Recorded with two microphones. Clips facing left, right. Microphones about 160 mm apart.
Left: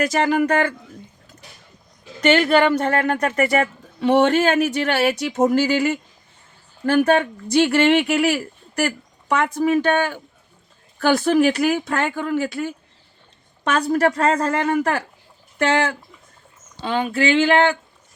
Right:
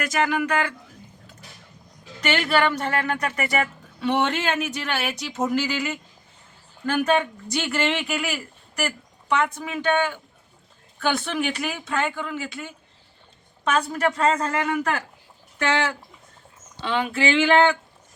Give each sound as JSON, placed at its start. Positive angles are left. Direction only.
{"t": 0.0, "sound": "speech", "side_deg": 35}
{"t": 2.2, "sound": "a woman's voice", "side_deg": 40}
{"t": 8.2, "sound": "a woman's voice", "side_deg": 40}
{"t": 13.7, "sound": "speech", "side_deg": 40}
{"t": 16.8, "sound": "speech", "side_deg": 35}